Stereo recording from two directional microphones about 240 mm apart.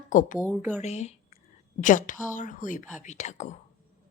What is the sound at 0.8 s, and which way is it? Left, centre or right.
A woman's voice, left.